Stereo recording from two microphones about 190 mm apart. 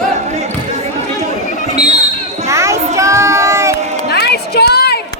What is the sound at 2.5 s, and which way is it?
Child singing, 15° right (ahead or behind).